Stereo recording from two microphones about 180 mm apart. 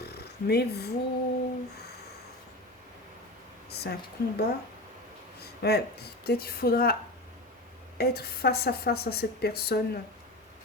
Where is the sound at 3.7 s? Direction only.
65° left (ahead or behind).